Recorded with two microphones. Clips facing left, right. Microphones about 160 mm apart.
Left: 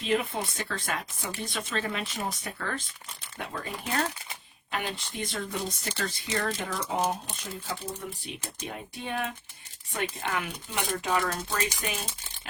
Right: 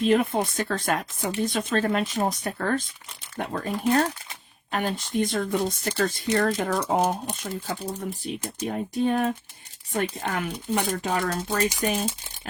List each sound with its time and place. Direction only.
0.0 s speech: 50° right (ahead or behind)
4.7 s speech: 45° right (ahead or behind)
8.3 s speech: 45° right (ahead or behind)